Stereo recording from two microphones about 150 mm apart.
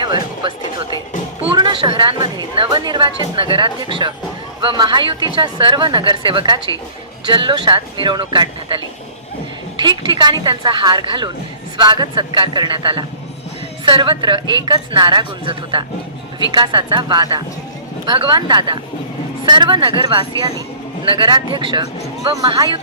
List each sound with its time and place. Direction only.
0.0 s music: 30° right (ahead or behind)
2.6 s a woman's voice: 30° right (ahead or behind)
9.8 s a woman's voice: 30° right (ahead or behind)